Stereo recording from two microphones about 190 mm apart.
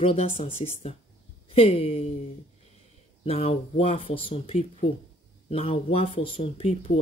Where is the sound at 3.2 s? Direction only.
30° left (ahead or behind).